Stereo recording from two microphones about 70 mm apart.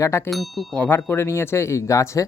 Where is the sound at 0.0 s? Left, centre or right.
Left.